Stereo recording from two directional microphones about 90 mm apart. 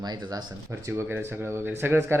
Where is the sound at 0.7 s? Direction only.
25° right (ahead or behind).